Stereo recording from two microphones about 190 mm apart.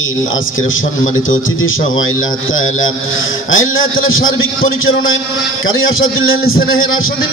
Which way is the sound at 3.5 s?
90° left.